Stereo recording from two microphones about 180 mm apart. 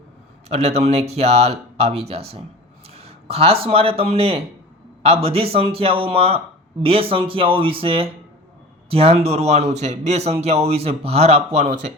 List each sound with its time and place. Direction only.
0.4 s speech: 35° right (ahead or behind)